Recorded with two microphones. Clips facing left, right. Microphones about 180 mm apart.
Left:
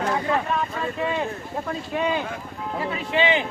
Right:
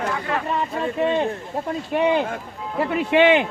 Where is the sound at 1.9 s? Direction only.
60° right (ahead or behind).